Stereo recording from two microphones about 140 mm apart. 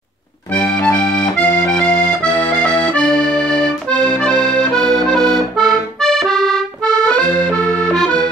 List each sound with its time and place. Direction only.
0.6 s accordion: 20° left (ahead or behind)
3.9 s accordion: 5° left (ahead or behind)